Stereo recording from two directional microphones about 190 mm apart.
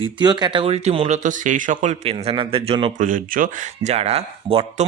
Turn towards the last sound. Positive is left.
turn(degrees=-30)  # may be behind; listen again after turning